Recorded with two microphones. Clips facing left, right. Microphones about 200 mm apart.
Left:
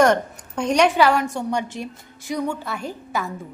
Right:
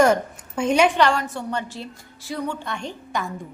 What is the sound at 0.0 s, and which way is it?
A woman's voice, 5° right (ahead or behind).